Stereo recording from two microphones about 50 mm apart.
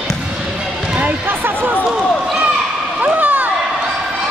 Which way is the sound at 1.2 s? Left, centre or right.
Right.